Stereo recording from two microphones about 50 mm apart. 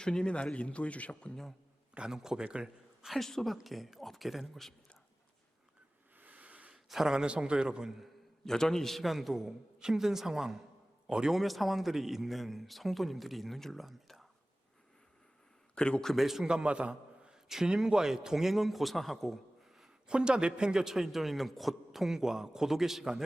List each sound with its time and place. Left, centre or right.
0.0 s speech: centre
2.0 s a man's voice: centre
3.2 s a man's voice: centre
6.1 s a sound: right
6.8 s a man's voice: centre
8.4 s a man's voice: centre
11.3 s a man's voice: centre
15.7 s speech: centre
16.0 s a man's voice: centre
16.5 s a man's voice: right
17.5 s a man's voice: centre
20.1 s a man's voice: centre